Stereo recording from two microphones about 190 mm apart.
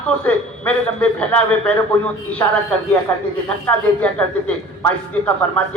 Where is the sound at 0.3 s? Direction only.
5° left (ahead or behind).